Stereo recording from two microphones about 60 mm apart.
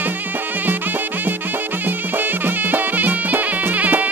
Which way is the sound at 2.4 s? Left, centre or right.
Right.